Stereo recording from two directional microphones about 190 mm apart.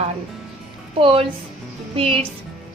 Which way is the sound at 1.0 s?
30° right (ahead or behind).